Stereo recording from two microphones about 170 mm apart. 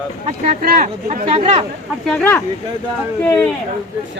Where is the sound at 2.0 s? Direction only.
10° left (ahead or behind).